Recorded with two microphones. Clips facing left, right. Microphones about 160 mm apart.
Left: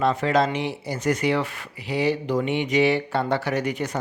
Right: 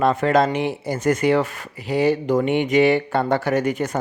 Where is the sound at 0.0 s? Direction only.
50° right (ahead or behind).